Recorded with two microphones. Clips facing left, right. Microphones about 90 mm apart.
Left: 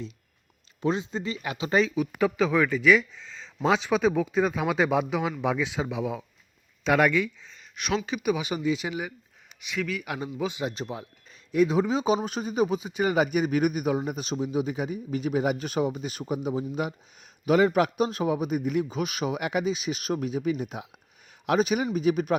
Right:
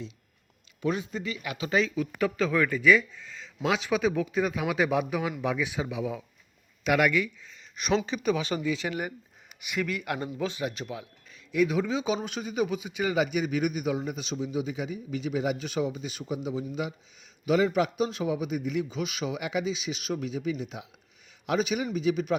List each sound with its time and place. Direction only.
0.8 s speech: 30° left (ahead or behind)
2.1 s speech: 15° left (ahead or behind)
2.6 s speech: 5° left (ahead or behind)
3.7 s speech: 30° left (ahead or behind)
7.8 s speech: 5° left (ahead or behind)
9.6 s speech: 5° right (ahead or behind); by 10.7 s 15° left (ahead or behind)
10.7 s a man's voice: 30° left (ahead or behind); by 22.4 s 50° left (ahead or behind)